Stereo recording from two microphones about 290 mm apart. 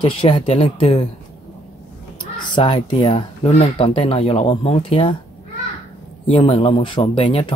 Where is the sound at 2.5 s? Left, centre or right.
Centre.